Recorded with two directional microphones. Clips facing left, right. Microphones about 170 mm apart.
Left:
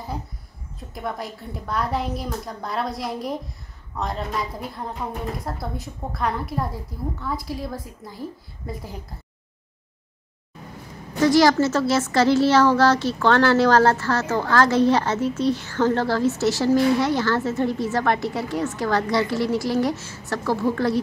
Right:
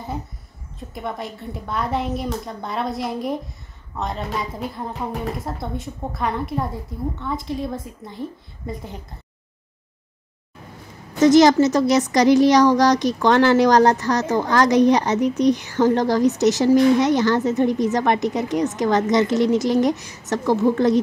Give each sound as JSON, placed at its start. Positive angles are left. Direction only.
{"t": 0.9, "sound": "a woman's voice", "side_deg": 0}
{"t": 11.1, "sound": "a woman's voice", "side_deg": -20}